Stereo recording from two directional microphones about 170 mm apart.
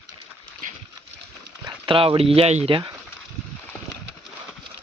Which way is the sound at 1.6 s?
30° right (ahead or behind).